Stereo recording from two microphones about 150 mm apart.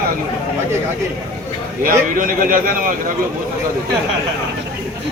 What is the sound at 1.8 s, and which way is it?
Speech, 65° right (ahead or behind).